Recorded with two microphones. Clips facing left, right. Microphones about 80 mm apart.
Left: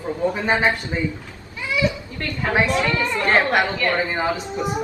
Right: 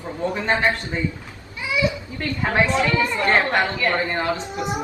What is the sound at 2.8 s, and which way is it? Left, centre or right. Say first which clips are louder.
Speech: right 1 dB; right.